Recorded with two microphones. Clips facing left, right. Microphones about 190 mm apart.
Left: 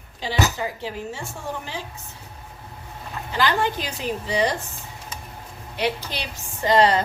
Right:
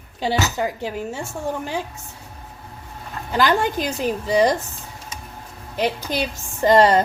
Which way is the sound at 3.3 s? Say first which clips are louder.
Right 4 dB; 45° right (ahead or behind).